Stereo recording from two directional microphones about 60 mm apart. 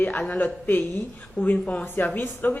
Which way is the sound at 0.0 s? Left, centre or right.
Left.